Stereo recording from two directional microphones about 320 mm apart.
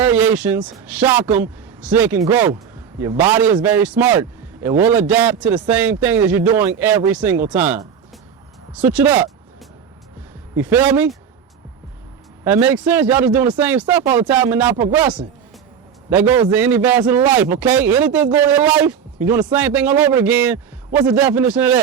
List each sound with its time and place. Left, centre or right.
0.0 s a man's voice: centre
10.6 s a man's voice: centre
12.5 s a man's voice: centre